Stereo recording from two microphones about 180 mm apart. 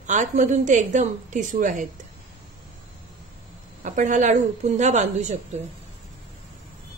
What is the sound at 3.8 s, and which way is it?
A woman's voice, 45° right (ahead or behind).